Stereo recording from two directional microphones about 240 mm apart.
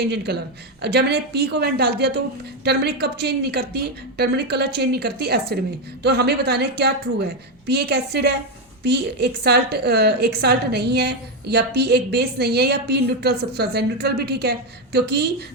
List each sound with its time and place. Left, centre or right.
0.0 s a woman's voice: right